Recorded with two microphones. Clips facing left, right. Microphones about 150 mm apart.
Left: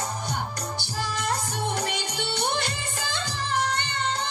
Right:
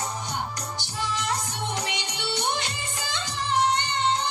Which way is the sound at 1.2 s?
50° left (ahead or behind).